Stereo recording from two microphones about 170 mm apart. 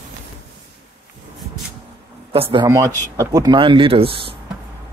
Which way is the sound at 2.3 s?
30° right (ahead or behind).